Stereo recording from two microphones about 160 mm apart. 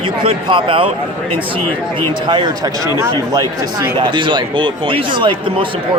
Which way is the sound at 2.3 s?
30° right (ahead or behind).